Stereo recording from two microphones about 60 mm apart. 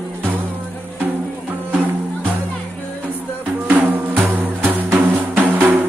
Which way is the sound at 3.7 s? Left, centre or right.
Right.